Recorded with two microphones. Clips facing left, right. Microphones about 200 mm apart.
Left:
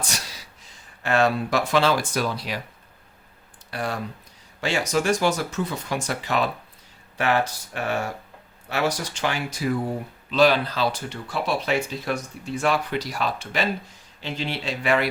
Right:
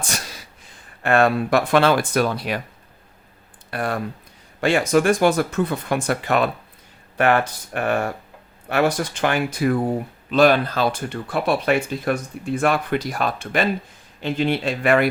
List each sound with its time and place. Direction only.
0.0 s speech: 50° right (ahead or behind)
3.7 s speech: 55° right (ahead or behind)